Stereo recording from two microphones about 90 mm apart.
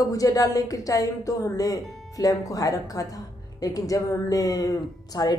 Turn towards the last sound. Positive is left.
turn(degrees=45)  # may be behind; listen again after turning